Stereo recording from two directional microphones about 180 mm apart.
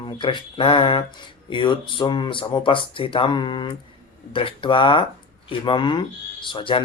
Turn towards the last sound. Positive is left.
turn(degrees=30)  # may be behind; listen again after turning